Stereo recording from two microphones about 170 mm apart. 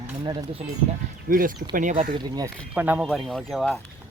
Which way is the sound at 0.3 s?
25° right (ahead or behind).